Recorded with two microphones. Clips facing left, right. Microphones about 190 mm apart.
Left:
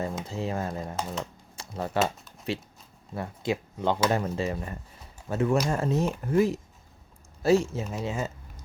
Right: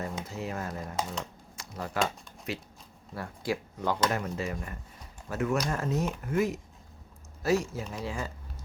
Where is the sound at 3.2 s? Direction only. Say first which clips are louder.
Left 3 dB; 20° left (ahead or behind).